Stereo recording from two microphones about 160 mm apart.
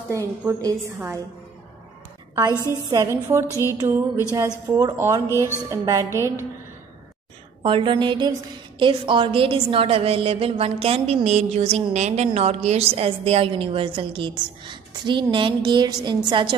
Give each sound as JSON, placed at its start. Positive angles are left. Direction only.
{"t": 0.1, "sound": "a woman's voice", "side_deg": -20}
{"t": 2.3, "sound": "a woman's voice", "side_deg": -25}
{"t": 3.4, "sound": "music", "side_deg": 20}
{"t": 3.8, "sound": "a woman's voice", "side_deg": -20}
{"t": 7.6, "sound": "a woman's voice", "side_deg": -30}